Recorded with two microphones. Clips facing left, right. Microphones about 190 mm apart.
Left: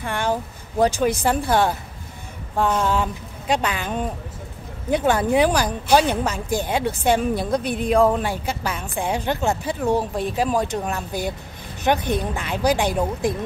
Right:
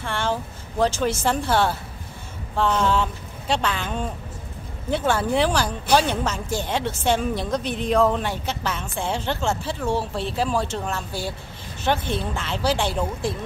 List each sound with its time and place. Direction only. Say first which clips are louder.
0.0 s a woman's voice: left 2 dB; 15° left (ahead or behind)